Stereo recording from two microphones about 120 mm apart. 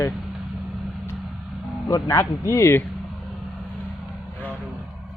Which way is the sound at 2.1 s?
25° left (ahead or behind).